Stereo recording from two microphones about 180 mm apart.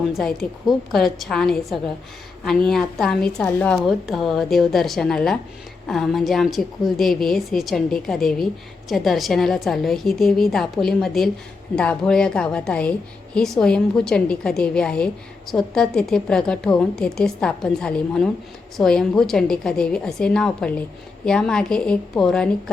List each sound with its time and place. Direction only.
0.1 s a woman's voice: centre (ahead or behind)